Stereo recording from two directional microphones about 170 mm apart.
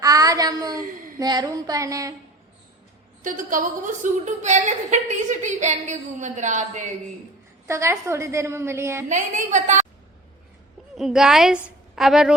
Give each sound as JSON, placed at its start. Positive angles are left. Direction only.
{"t": 0.0, "sound": "child singing", "side_deg": -20}
{"t": 1.2, "sound": "a woman's voice", "side_deg": -25}
{"t": 3.2, "sound": "a woman's voice", "side_deg": -55}
{"t": 7.7, "sound": "a woman's voice", "side_deg": -15}
{"t": 9.0, "sound": "a woman's voice", "side_deg": -45}
{"t": 10.9, "sound": "a woman's voice", "side_deg": -5}